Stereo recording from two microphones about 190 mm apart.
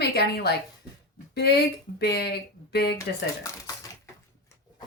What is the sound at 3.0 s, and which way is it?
Speech, 15° left (ahead or behind).